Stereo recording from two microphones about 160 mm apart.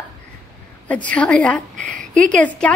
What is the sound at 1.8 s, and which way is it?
Speech, 55° right (ahead or behind).